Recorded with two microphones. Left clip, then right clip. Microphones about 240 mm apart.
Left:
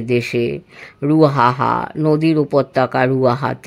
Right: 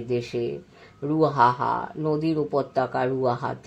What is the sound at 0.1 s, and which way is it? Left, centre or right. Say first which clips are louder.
Speech: left 9 dB; left.